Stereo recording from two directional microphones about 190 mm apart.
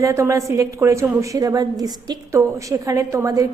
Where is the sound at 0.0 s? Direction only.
15° right (ahead or behind).